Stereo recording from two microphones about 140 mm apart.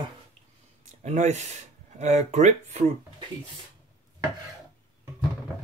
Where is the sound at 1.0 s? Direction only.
55° right (ahead or behind).